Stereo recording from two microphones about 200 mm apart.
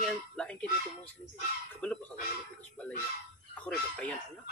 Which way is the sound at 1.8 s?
5° left (ahead or behind).